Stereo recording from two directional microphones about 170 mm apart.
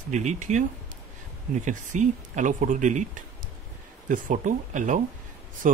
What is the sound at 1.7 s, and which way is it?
Speech, 45° right (ahead or behind).